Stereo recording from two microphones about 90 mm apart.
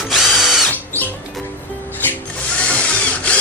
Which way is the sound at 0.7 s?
20° left (ahead or behind).